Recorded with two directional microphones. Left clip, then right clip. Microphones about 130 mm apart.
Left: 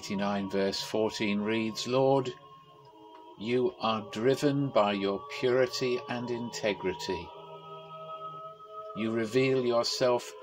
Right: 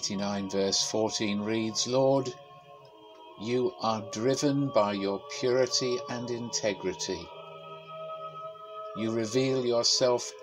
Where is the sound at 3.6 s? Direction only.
10° left (ahead or behind).